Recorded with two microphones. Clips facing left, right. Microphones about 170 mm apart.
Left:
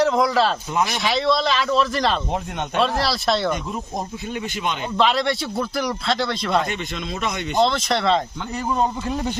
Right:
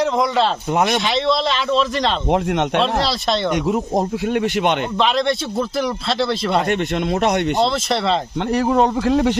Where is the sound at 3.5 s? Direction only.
80° right.